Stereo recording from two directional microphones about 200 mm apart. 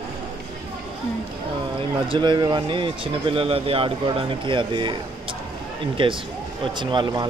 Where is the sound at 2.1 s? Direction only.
20° right (ahead or behind).